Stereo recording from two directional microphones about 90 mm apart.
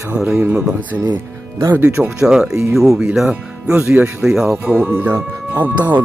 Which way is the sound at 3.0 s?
10° right (ahead or behind).